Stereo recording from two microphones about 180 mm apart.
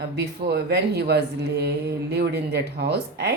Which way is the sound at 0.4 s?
65° right (ahead or behind).